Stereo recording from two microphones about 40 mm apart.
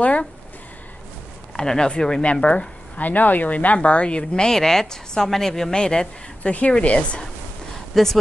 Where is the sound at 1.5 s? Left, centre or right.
Centre.